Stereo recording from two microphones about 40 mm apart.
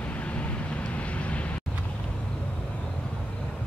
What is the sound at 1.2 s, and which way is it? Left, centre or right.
Vehicle, left.